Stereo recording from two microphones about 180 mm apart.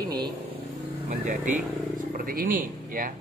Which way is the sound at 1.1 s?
45° right (ahead or behind).